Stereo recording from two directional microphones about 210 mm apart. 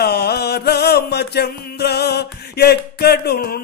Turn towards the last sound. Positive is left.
turn(degrees=45)  # may be behind; listen again after turning